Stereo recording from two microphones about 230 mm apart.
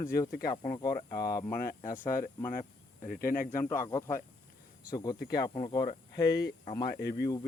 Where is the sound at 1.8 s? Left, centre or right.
Left.